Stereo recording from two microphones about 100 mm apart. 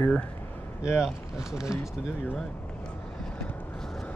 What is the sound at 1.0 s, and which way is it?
Speech, 5° right (ahead or behind).